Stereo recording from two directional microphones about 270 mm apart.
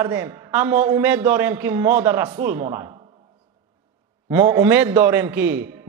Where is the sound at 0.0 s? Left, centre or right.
Centre.